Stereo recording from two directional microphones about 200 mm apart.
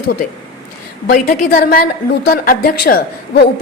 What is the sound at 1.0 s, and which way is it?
A woman's voice, 45° left (ahead or behind).